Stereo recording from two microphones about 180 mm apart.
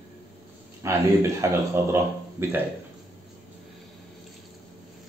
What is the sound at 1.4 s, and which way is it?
Speech, 15° right (ahead or behind).